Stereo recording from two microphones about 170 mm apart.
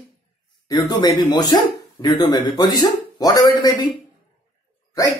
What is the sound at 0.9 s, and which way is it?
Speech, 25° left (ahead or behind).